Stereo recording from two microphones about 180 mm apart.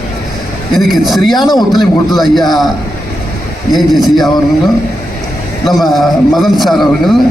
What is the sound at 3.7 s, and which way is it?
Speech, centre (ahead or behind).